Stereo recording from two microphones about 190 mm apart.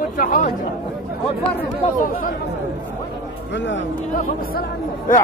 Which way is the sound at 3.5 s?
70° left (ahead or behind).